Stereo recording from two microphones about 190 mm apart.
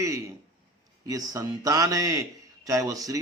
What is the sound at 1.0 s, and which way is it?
A man's voice, 20° right (ahead or behind).